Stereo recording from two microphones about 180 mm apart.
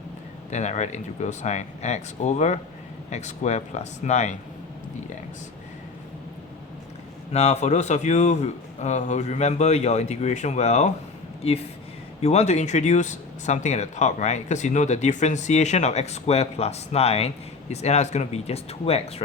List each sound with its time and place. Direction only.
0.5 s speech: 40° left (ahead or behind)
7.3 s speech: 35° left (ahead or behind)